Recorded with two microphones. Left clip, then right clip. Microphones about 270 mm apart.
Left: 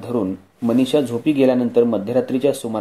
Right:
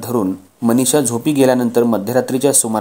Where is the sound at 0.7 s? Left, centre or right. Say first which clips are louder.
Right 2 dB; right.